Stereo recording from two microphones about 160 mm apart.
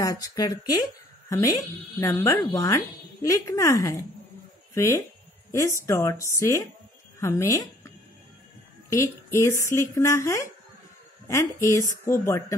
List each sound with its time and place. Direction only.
0.0 s speech: 20° left (ahead or behind)
8.9 s speech: 20° left (ahead or behind)